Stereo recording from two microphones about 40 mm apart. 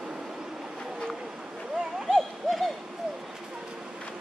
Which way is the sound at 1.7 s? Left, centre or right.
Centre.